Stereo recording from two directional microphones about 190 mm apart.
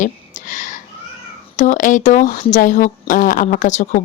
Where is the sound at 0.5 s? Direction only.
40° left (ahead or behind).